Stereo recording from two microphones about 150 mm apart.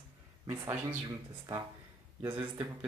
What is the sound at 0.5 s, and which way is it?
Speech, 20° right (ahead or behind).